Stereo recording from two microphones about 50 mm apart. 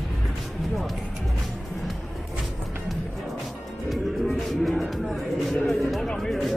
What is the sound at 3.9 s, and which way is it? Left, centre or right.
Music, centre.